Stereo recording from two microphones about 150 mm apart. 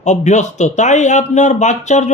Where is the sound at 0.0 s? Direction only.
50° left (ahead or behind).